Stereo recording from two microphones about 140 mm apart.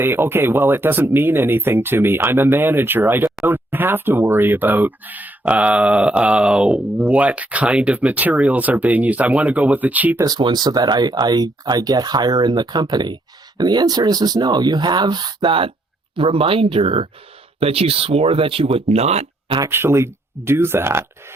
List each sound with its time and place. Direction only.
0.0 s speech: 15° right (ahead or behind)
10.2 s speech: 30° right (ahead or behind); by 19.5 s 50° right (ahead or behind)
19.5 s speech: 20° right (ahead or behind)